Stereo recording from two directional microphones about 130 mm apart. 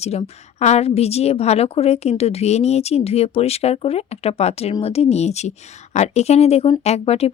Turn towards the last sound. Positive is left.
turn(degrees=55)  # may be behind; listen again after turning